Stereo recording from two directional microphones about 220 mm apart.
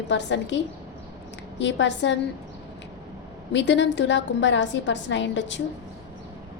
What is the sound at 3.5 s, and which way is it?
A woman's voice, 55° left (ahead or behind).